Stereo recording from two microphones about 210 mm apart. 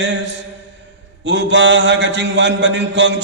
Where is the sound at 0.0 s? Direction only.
60° right (ahead or behind).